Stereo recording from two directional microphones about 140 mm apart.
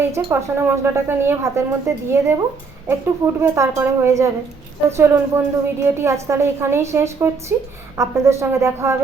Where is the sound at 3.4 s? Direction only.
20° right (ahead or behind).